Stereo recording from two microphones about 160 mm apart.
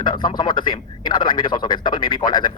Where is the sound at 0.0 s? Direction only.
30° left (ahead or behind).